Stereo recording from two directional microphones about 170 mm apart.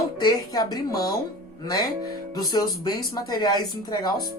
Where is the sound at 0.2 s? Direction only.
25° left (ahead or behind).